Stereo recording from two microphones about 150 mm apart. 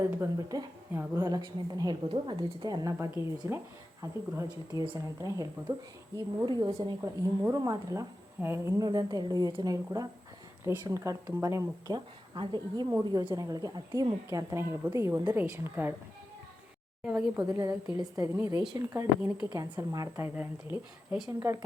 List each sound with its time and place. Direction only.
0.2 s a woman's voice: 25° right (ahead or behind)
1.4 s a woman's voice: 30° right (ahead or behind)
17.0 s speech: 10° right (ahead or behind)
17.4 s a woman's voice: 20° right (ahead or behind)